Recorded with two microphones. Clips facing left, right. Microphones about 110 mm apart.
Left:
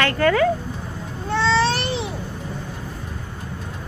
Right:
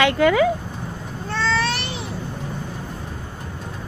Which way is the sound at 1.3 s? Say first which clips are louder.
Left 4 dB; 25° left (ahead or behind).